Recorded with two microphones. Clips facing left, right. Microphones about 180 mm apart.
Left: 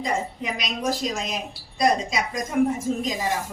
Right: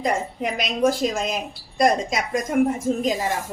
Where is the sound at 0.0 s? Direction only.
55° right (ahead or behind).